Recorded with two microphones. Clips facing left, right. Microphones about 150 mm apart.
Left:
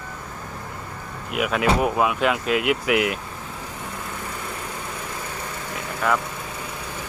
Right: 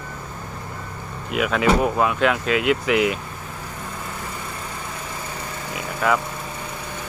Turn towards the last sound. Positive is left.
turn(degrees=-5)  # may be behind; listen again after turning